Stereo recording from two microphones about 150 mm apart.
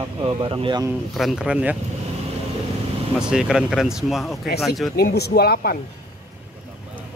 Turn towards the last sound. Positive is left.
turn(degrees=85)